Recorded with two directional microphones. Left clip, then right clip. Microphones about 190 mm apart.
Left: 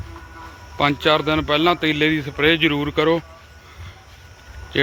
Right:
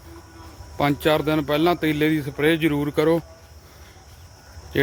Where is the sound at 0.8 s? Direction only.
15° right (ahead or behind).